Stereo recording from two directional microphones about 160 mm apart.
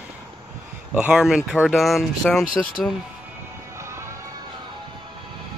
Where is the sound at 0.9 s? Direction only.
5° right (ahead or behind).